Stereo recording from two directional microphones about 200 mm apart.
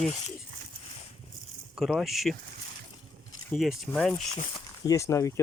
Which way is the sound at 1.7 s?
Centre (ahead or behind).